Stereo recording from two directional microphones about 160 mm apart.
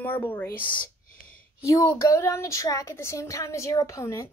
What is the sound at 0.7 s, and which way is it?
Whispering, 60° left (ahead or behind).